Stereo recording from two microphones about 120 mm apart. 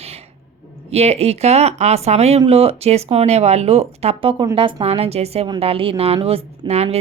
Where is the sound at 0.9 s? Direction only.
60° right (ahead or behind).